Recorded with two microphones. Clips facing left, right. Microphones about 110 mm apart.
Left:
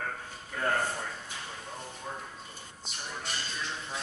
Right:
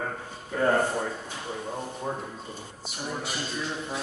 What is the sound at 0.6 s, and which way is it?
Speech, 20° right (ahead or behind).